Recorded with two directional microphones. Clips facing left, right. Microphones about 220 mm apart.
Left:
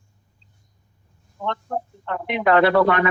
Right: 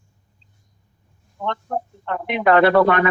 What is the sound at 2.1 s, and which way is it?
Speech, 50° right (ahead or behind).